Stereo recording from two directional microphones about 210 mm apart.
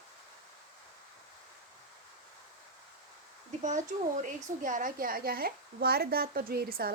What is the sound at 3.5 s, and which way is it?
A woman's voice, 35° right (ahead or behind).